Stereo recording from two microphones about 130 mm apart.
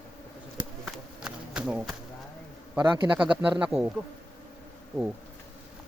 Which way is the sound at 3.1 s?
10° right (ahead or behind).